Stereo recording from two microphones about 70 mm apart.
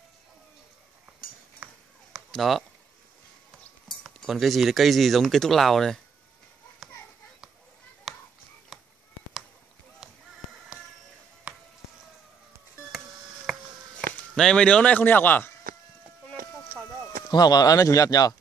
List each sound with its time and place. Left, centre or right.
1.6 s a sound: right
2.3 s speech: centre
4.3 s speech: centre
8.1 s chop: centre
10.0 s a sound: centre
11.5 s music: centre
13.5 s a sound: centre
14.3 s speech: centre; by 15.5 s left
17.3 s speech: left